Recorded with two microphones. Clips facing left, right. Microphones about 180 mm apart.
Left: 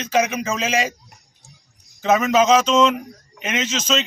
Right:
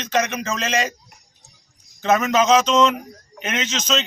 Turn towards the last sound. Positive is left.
turn(degrees=5)  # may be behind; listen again after turning